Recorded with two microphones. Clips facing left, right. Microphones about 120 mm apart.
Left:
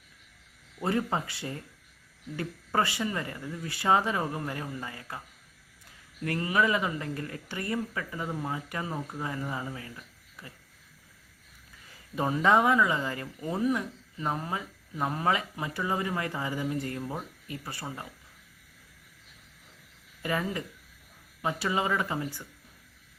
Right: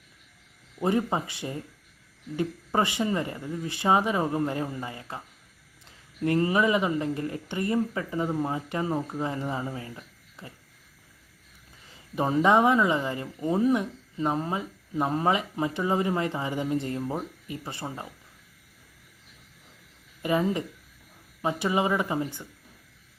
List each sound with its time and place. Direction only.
0.8 s speech: 20° right (ahead or behind)
6.2 s speech: 25° right (ahead or behind)
12.1 s speech: 25° right (ahead or behind)
20.2 s speech: 20° right (ahead or behind)